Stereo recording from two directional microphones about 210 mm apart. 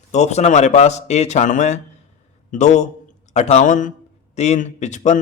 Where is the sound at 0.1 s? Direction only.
35° left (ahead or behind).